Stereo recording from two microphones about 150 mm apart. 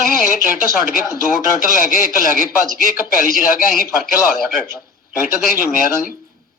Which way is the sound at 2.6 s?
65° right (ahead or behind).